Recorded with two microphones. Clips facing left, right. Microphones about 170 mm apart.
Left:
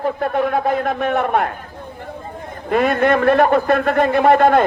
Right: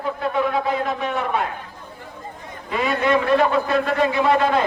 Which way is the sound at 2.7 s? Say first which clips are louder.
Left 5 dB; 55° left (ahead or behind).